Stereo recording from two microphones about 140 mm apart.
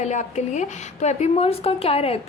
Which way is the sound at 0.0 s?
55° left (ahead or behind).